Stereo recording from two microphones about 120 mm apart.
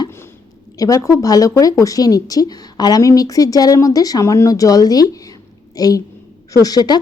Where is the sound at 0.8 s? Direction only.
30° left (ahead or behind).